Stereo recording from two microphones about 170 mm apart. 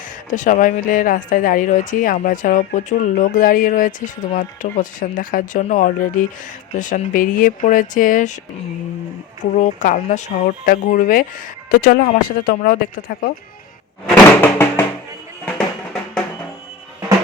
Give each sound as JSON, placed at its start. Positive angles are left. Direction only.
{"t": 0.3, "sound": "a woman's voice", "side_deg": 50}
{"t": 9.6, "sound": "a woman's voice", "side_deg": 45}
{"t": 14.4, "sound": "music", "side_deg": 10}
{"t": 15.5, "sound": "drum", "side_deg": 5}